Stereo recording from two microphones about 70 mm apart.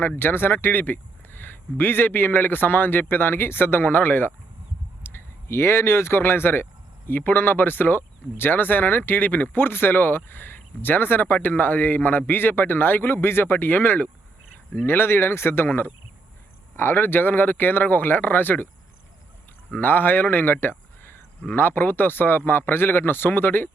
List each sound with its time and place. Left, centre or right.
0.2 s speech: left
19.7 s speech: left